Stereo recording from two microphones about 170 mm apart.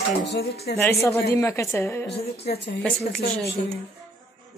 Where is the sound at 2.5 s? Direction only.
85° left.